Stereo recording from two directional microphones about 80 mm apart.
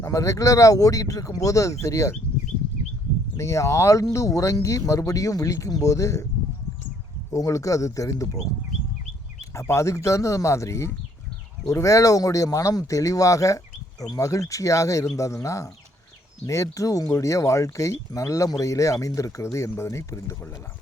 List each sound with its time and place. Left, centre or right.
0.0 s speech: left
3.3 s speech: left
7.3 s speech: left
9.4 s speech: left